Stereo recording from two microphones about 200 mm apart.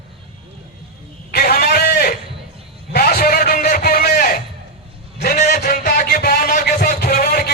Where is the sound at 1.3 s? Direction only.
50° left (ahead or behind).